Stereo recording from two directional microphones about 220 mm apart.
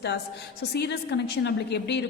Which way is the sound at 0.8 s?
50° left (ahead or behind).